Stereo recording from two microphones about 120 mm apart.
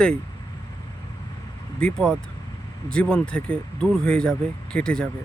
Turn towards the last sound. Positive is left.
turn(degrees=5)  # may be behind; listen again after turning